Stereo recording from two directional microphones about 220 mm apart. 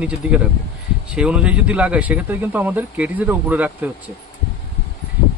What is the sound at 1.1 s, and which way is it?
Speech, 5° right (ahead or behind).